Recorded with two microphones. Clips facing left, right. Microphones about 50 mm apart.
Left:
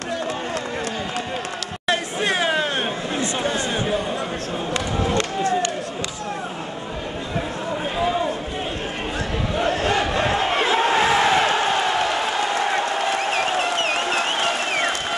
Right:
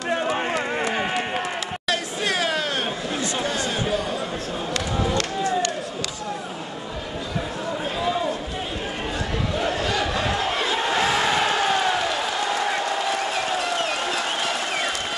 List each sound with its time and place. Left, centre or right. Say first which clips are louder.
0.1 s run: right 3 dB; right
1.9 s chatter: left 4 dB; left
3.2 s a sound: left 3 dB; left
8.0 s run: left 2 dB; centre
9.6 s a sound: left 4 dB; left
12.5 s crowd: left 2 dB; left
13.7 s crowd: left 3 dB; left
14.1 s applause: left 4 dB; left
14.7 s a sound: left 3 dB; left